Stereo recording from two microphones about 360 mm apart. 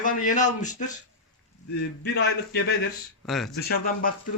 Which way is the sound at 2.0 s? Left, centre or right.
Left.